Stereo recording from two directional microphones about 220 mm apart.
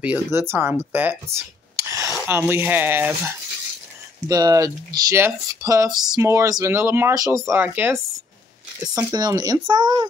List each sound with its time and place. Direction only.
0.0 s speech: 10° right (ahead or behind)
1.8 s a sound: 15° right (ahead or behind)
2.1 s speech: 10° right (ahead or behind)